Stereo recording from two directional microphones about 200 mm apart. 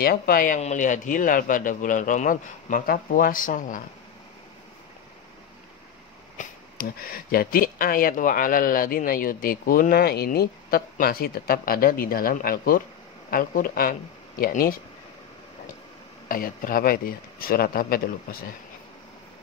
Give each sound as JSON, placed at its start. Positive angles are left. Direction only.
{"t": 0.0, "sound": "speech", "side_deg": 50}
{"t": 6.3, "sound": "speech", "side_deg": 50}
{"t": 16.3, "sound": "speech", "side_deg": 45}